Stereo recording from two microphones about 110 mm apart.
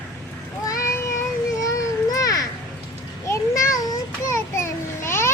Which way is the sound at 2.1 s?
35° left (ahead or behind).